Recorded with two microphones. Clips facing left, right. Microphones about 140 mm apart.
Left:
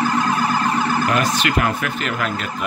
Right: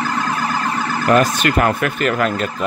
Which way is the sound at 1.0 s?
45° right (ahead or behind).